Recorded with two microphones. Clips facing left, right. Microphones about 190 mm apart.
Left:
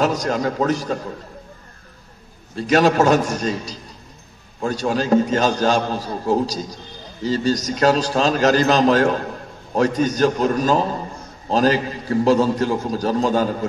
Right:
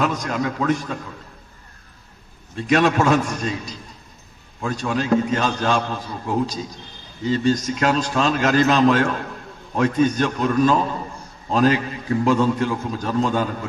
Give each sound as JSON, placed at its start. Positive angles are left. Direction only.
{"t": 0.0, "sound": "a man's voice", "side_deg": 35}
{"t": 2.5, "sound": "a man's voice", "side_deg": 40}